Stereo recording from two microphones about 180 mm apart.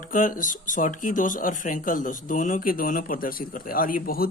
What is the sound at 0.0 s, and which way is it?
Speech, 50° left (ahead or behind).